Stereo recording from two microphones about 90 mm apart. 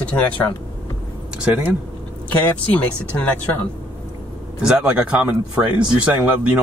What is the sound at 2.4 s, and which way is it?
Speech, 15° left (ahead or behind).